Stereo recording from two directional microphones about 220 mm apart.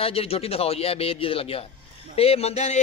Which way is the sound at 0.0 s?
25° left (ahead or behind).